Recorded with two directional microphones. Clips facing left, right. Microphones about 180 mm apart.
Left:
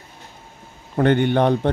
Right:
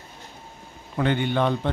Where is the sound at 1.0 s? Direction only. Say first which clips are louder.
Left 6 dB; 55° left (ahead or behind).